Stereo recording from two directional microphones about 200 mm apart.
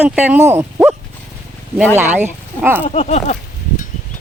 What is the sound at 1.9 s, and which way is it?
Speech, 10° right (ahead or behind).